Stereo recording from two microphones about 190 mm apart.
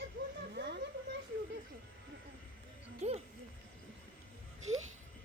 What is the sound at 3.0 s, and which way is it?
Speech, 40° right (ahead or behind).